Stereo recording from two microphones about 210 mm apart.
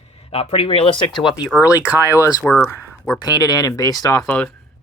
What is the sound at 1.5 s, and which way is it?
Speech, 15° left (ahead or behind).